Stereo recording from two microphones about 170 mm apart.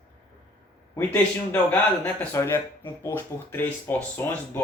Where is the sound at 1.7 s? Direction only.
15° left (ahead or behind).